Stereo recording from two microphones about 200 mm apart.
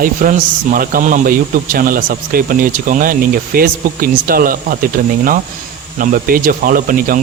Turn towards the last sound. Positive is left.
turn(degrees=-45)  # may be behind; listen again after turning